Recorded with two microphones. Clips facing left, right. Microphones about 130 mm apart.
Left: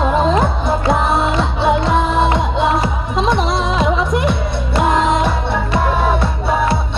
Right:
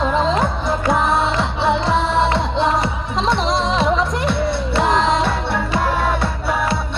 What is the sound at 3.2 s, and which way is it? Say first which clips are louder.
Music: left 1 dB; 10° left (ahead or behind).